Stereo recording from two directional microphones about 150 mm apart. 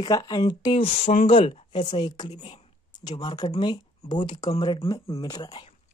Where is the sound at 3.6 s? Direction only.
30° left (ahead or behind).